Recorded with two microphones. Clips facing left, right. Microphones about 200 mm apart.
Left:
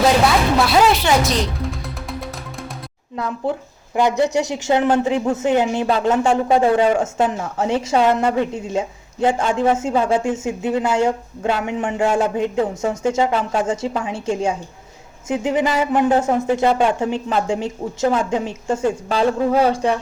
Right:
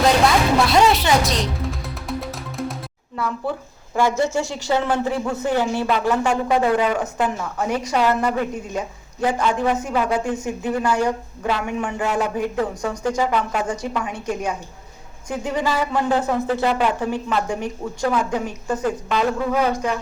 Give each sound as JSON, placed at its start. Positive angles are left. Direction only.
{"t": 0.7, "sound": "music", "side_deg": 0}
{"t": 3.2, "sound": "speech", "side_deg": 20}